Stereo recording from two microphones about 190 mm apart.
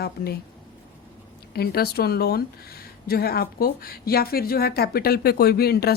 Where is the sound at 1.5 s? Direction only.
55° left (ahead or behind).